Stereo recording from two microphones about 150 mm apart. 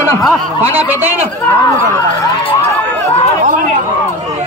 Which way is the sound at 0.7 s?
15° right (ahead or behind).